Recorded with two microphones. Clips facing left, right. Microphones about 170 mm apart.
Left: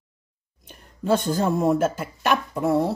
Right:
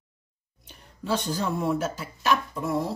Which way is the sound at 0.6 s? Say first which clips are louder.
Left 7 dB; 50° left (ahead or behind).